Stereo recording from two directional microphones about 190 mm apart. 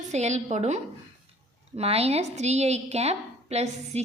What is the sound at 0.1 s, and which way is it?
A woman's voice, 35° right (ahead or behind).